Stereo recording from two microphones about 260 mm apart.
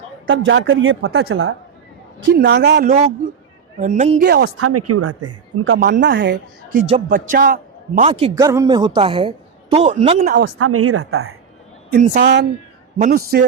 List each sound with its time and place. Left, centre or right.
0.3 s a woman's voice: right
4.3 s a woman's voice: right
4.6 s speech: right
5.8 s a woman's voice: right
7.1 s a man's voice: right
10.2 s a woman's voice: right
10.6 s speech: right
11.9 s a woman's voice: right
12.2 s a woman's voice: right